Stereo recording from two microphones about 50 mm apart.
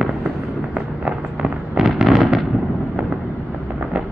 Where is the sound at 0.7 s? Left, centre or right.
Centre.